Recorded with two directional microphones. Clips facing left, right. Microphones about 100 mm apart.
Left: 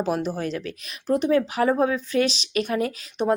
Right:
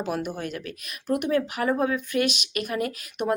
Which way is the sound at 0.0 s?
30° left (ahead or behind).